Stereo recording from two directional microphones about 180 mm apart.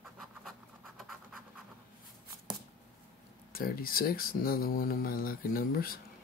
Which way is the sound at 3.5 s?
55° left (ahead or behind).